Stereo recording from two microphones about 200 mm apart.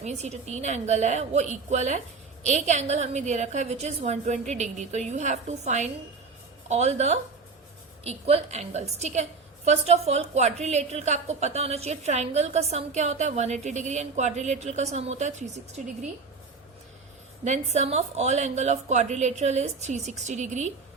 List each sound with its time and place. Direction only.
0.0 s a woman's voice: 35° right (ahead or behind)
17.4 s a woman's voice: 35° right (ahead or behind)